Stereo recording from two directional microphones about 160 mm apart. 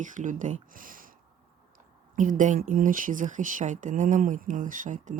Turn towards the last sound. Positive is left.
turn(degrees=-55)  # may be behind; listen again after turning